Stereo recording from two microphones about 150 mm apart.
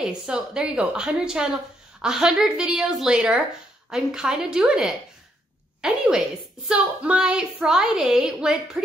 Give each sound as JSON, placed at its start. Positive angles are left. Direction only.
{"t": 0.0, "sound": "speech", "side_deg": -5}